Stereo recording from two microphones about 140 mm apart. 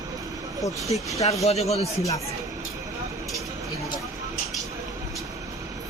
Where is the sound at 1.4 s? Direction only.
50° left (ahead or behind).